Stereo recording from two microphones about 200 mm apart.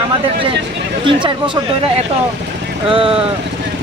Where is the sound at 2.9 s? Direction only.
25° right (ahead or behind).